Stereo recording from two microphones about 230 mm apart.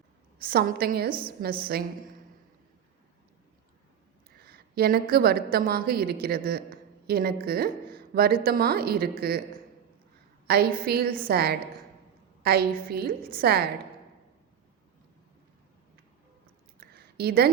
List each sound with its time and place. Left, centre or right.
0.4 s a woman's voice: right
4.4 s a woman's voice: right
10.4 s a woman's voice: right
16.9 s a sound: right